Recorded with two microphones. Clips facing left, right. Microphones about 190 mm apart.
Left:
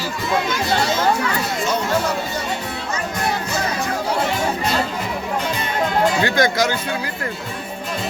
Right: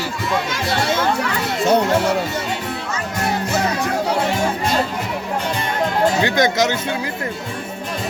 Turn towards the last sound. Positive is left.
turn(degrees=-20)  # may be behind; listen again after turning